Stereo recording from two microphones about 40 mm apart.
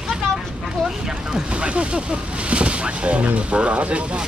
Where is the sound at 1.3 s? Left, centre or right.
Right.